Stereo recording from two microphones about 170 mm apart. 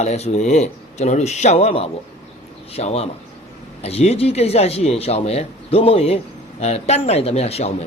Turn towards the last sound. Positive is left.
turn(degrees=35)  # may be behind; listen again after turning